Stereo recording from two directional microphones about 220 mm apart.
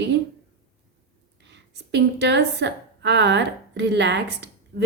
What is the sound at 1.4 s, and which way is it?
A woman's voice, 50° right (ahead or behind).